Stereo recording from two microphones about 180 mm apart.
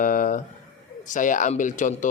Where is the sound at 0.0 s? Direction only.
50° left (ahead or behind).